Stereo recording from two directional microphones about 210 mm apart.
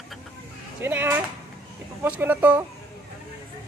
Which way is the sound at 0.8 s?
10° right (ahead or behind).